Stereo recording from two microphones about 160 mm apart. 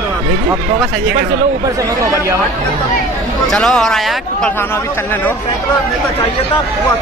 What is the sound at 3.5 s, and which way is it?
A man's voice, 5° left (ahead or behind).